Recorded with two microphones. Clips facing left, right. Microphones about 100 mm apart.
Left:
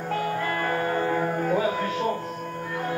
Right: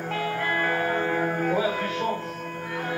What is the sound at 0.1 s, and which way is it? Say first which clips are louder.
Music: left 1 dB; 30° left (ahead or behind).